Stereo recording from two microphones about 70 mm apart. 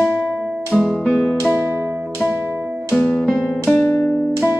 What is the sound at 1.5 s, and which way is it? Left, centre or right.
Music, right.